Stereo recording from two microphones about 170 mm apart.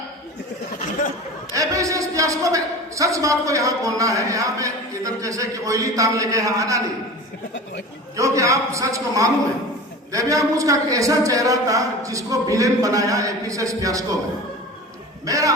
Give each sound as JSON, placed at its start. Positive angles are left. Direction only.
{"t": 1.5, "sound": "a man's voice", "side_deg": -20}
{"t": 8.1, "sound": "a man's voice", "side_deg": -20}
{"t": 15.3, "sound": "a man's voice", "side_deg": -20}